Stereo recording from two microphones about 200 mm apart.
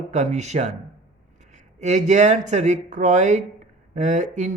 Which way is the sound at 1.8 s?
35° right (ahead or behind).